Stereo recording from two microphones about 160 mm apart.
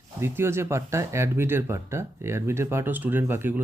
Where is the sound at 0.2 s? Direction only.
15° right (ahead or behind).